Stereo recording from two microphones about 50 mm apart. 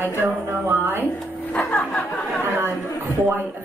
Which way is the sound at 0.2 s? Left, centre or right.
Right.